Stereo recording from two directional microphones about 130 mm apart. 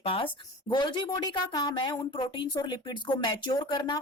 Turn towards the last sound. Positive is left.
turn(degrees=35)  # may be behind; listen again after turning